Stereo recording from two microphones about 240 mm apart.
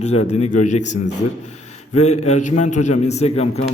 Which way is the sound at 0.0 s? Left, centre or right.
Left.